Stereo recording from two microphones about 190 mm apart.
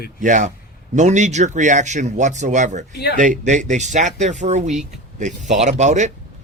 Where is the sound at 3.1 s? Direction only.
45° right (ahead or behind).